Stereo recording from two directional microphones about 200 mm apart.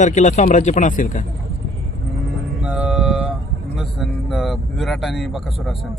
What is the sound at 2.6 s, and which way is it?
Mantra, 5° right (ahead or behind).